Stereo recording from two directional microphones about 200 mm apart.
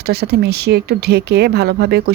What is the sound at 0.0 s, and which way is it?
Speech, 55° right (ahead or behind).